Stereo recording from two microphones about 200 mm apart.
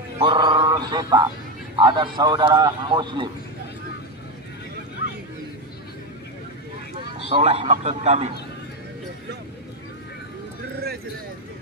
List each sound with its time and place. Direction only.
0.2 s a man's voice: 25° right (ahead or behind)
7.0 s speech: 30° right (ahead or behind)